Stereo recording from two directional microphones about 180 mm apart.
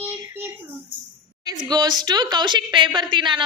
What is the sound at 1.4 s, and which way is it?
A woman's voice, 20° right (ahead or behind).